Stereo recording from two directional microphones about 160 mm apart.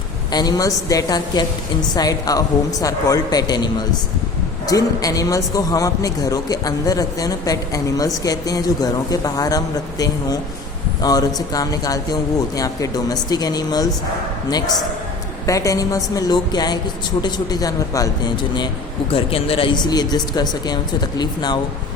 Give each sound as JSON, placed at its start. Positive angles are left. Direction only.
{"t": 0.3, "sound": "speech", "side_deg": 25}
{"t": 15.4, "sound": "speech", "side_deg": 20}
{"t": 19.1, "sound": "speech", "side_deg": 35}